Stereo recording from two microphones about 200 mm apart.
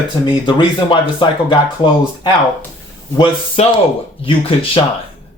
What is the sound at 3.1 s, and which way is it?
Speech, 25° left (ahead or behind).